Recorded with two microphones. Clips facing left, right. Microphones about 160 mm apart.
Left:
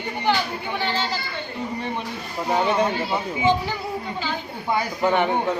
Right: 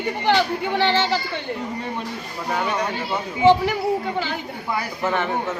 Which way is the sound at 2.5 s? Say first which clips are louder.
Left 3 dB; 25° left (ahead or behind).